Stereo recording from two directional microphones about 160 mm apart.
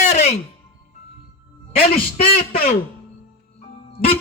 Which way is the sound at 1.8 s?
60° left (ahead or behind).